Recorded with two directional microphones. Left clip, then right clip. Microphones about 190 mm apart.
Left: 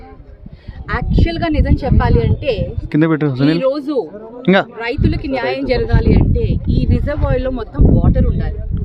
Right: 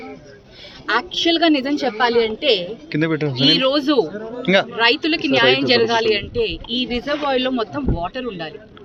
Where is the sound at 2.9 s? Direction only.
45° left (ahead or behind).